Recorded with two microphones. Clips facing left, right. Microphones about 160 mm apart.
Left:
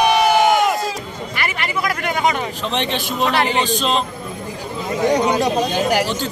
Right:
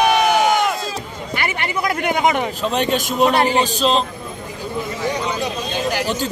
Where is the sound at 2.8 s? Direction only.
45° right (ahead or behind).